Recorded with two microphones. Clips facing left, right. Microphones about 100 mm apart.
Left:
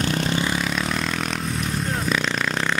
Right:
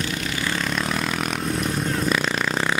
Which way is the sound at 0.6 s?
Centre (ahead or behind).